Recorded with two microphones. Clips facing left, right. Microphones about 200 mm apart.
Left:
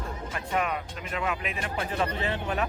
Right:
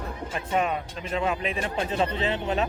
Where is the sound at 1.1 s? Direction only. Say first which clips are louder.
Right 5 dB; 30° right (ahead or behind).